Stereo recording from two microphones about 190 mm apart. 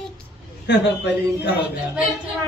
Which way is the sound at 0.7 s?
65° left (ahead or behind).